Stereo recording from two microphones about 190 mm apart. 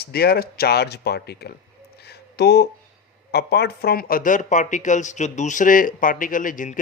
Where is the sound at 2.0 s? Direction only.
60° left (ahead or behind).